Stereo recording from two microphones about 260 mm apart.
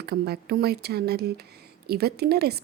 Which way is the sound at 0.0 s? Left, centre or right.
Right.